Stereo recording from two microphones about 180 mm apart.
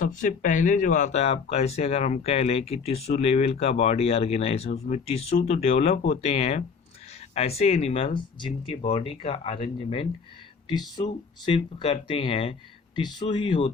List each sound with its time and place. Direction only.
0.0 s speech: 45° left (ahead or behind); by 13.7 s 30° left (ahead or behind)